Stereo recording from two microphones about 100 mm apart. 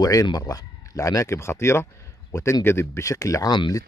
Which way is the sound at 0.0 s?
40° left (ahead or behind).